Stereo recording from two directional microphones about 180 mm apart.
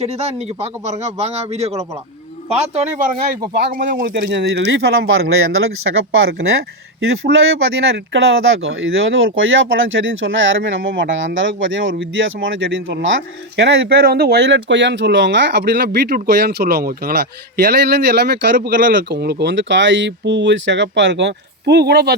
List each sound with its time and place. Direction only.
0.0 s a man's voice: 35° right (ahead or behind); by 5.3 s 80° right
6.1 s speech: 90° right
13.6 s speech: 60° right (ahead or behind)